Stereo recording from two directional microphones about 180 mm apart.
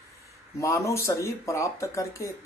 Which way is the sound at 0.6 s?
15° left (ahead or behind).